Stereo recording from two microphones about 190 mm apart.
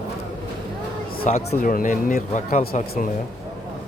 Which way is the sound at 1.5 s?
45° left (ahead or behind).